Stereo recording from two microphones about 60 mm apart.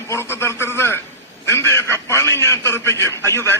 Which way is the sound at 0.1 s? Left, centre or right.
Left.